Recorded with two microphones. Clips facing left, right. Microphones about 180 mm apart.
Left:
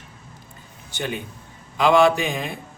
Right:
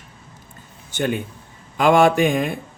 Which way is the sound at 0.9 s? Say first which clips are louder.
Right 6 dB; 50° right (ahead or behind).